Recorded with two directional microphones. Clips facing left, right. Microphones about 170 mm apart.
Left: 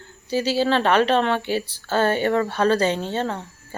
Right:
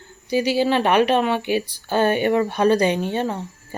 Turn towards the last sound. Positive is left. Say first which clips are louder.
# right 2 dB
turn(degrees=-15)  # may be behind; listen again after turning